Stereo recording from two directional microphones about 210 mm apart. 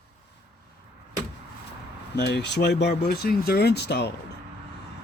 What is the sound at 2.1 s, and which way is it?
Speech, 55° left (ahead or behind).